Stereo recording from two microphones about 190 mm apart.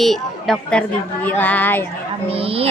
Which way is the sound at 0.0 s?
Centre (ahead or behind).